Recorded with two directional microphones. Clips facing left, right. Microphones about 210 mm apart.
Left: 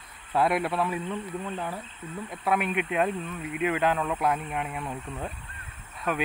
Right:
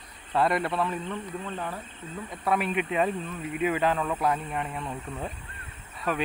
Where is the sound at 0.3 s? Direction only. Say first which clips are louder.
Even; 5° left (ahead or behind).